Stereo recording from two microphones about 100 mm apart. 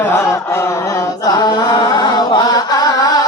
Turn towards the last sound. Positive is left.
turn(degrees=40)  # may be behind; listen again after turning